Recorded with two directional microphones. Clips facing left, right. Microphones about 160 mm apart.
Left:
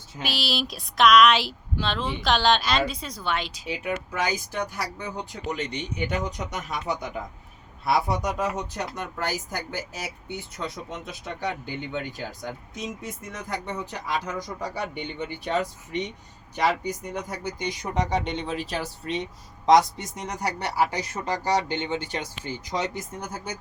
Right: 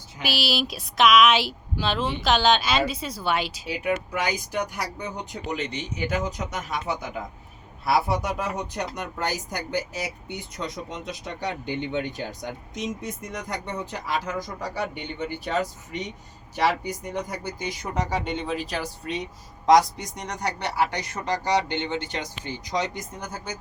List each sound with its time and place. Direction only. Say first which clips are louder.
0.2 s speech: right 2 dB; 5° right (ahead or behind)
6.0 s speech: right 2 dB; 5° right (ahead or behind)
14.3 s speech: right 1 dB; 5° right (ahead or behind)